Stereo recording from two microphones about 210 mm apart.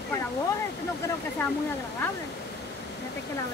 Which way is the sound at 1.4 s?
10° left (ahead or behind).